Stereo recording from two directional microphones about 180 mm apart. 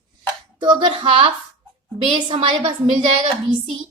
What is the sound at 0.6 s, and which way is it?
A woman's voice, 25° right (ahead or behind).